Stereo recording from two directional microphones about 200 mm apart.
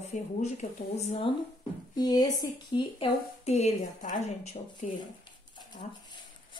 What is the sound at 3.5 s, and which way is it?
A woman's voice, 35° left (ahead or behind).